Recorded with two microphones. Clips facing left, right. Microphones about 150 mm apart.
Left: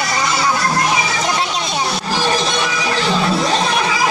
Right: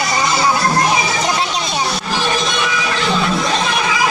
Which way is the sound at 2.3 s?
35° left (ahead or behind).